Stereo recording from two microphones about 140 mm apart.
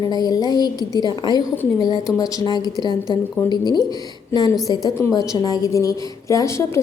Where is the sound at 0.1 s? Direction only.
30° left (ahead or behind).